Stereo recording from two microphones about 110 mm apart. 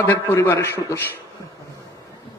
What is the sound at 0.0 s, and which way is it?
A man's voice, 20° left (ahead or behind).